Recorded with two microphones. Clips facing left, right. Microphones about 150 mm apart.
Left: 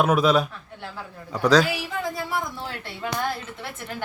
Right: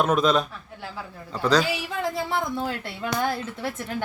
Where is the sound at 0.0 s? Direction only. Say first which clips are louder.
Left 1 dB; 10° left (ahead or behind).